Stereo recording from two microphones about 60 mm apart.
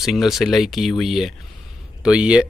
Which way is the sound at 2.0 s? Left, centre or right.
Centre.